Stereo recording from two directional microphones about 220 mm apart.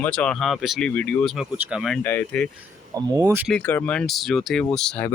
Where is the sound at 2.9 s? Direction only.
15° right (ahead or behind).